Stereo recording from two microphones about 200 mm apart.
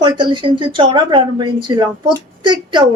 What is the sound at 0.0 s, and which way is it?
A woman's voice, 25° right (ahead or behind).